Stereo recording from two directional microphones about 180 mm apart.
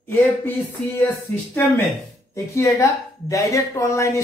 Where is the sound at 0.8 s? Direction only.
5° left (ahead or behind).